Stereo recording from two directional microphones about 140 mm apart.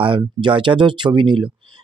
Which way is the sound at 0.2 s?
35° right (ahead or behind).